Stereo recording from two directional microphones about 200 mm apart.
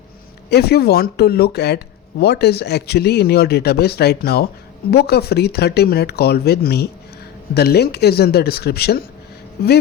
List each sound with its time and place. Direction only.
0.5 s speech: 50° left (ahead or behind)